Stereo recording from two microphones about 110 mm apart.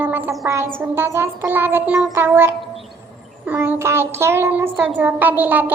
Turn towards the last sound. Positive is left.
turn(degrees=-15)  # may be behind; listen again after turning